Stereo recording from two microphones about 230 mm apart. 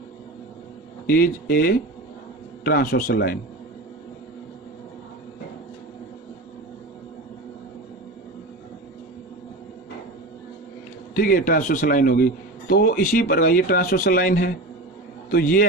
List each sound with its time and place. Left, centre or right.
1.0 s a man's voice: left
11.1 s a man's voice: left